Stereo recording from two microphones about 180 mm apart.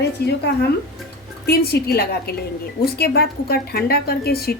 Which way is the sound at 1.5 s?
60° left (ahead or behind).